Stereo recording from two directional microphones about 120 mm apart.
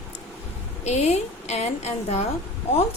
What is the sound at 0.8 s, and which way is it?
A woman's voice, 65° left (ahead or behind).